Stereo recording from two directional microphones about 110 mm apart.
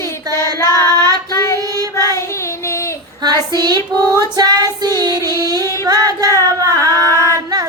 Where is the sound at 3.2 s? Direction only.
35° right (ahead or behind).